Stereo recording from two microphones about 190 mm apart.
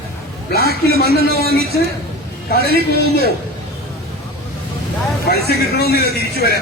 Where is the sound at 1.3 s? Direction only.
55° right (ahead or behind).